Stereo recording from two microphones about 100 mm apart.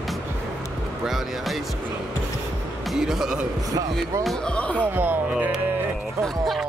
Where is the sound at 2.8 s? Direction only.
5° right (ahead or behind).